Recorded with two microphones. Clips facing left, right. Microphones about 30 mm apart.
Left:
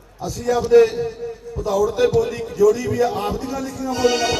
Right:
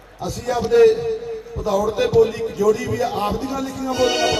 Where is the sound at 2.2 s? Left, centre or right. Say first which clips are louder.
Even; right.